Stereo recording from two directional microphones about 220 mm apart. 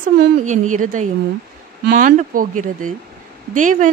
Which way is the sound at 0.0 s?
35° right (ahead or behind).